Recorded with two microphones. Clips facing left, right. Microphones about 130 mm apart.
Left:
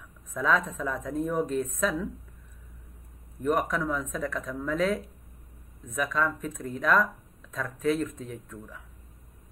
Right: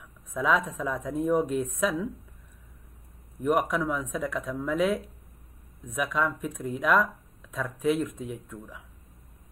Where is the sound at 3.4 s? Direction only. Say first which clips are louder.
Right 1 dB; 10° right (ahead or behind).